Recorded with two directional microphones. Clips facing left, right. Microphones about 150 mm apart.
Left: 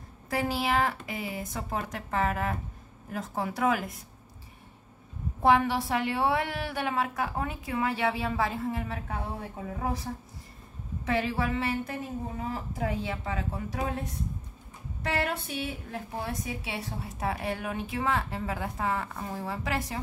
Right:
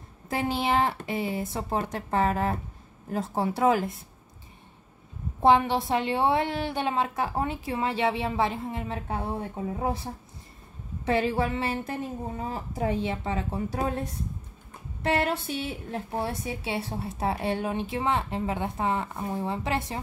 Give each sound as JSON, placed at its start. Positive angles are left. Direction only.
{"t": 0.3, "sound": "a woman's voice", "side_deg": -25}
{"t": 5.4, "sound": "a woman's voice", "side_deg": -25}
{"t": 11.1, "sound": "a woman's voice", "side_deg": -30}
{"t": 15.0, "sound": "a woman's voice", "side_deg": -30}